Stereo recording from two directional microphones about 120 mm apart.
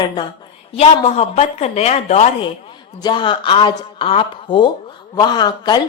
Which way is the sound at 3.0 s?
40° left (ahead or behind).